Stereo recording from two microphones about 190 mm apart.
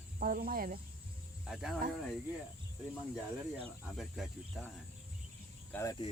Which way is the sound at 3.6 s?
Centre (ahead or behind).